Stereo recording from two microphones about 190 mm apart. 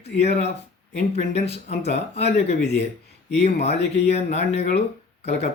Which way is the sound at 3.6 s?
35° left (ahead or behind).